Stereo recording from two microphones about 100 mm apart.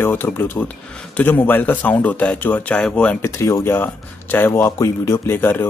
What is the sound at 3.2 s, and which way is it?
Speech, 30° left (ahead or behind).